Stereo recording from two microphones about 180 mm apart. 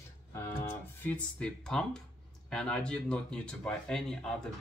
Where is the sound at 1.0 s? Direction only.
10° left (ahead or behind).